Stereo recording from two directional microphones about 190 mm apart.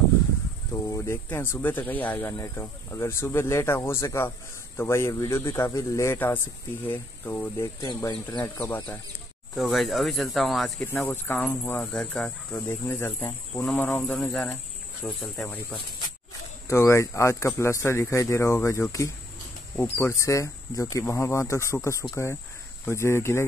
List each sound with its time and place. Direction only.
0.8 s speech: 15° left (ahead or behind)
12.5 s speech: 15° left (ahead or behind)
16.6 s speech: 15° left (ahead or behind)